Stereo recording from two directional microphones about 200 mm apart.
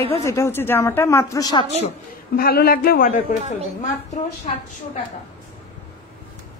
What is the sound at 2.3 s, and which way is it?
A man's voice, 50° left (ahead or behind).